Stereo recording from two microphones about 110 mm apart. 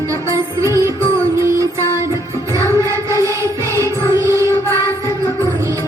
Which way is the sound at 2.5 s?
30° right (ahead or behind).